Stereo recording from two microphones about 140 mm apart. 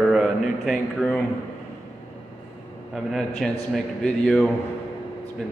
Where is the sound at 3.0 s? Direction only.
Centre (ahead or behind).